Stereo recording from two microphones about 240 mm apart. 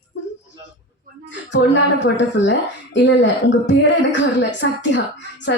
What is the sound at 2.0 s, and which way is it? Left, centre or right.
Speech, left.